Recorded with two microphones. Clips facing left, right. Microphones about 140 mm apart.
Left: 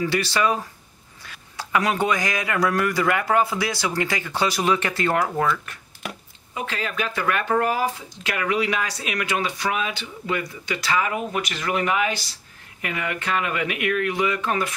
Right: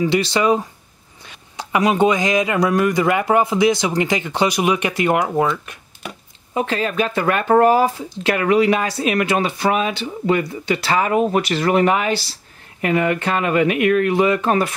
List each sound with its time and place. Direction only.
0.0 s speech: 20° right (ahead or behind)
6.0 s chopping: centre (ahead or behind)
6.5 s speech: 30° right (ahead or behind)